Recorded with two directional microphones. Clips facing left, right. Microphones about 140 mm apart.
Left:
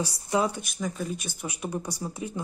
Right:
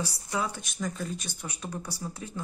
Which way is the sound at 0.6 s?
5° left (ahead or behind).